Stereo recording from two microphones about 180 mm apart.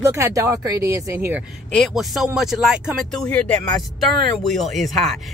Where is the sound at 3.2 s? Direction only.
10° left (ahead or behind).